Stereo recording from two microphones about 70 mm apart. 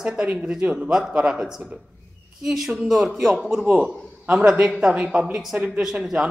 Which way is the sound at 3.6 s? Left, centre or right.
Centre.